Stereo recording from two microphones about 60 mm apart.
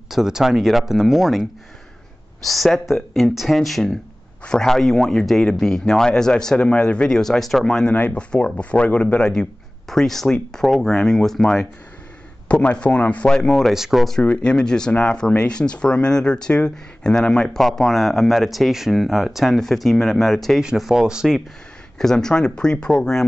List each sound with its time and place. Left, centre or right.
0.1 s speech: centre
7.2 s speech: centre
7.9 s a man's voice: left
12.4 s a man's voice: centre
13.7 s speech: centre
14.2 s speech: centre
21.9 s speech: centre